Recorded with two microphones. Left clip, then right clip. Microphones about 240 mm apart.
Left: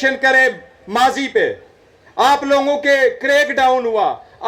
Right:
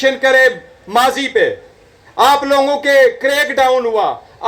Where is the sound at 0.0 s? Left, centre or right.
Left.